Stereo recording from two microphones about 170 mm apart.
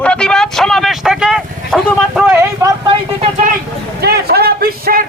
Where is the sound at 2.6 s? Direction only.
15° right (ahead or behind).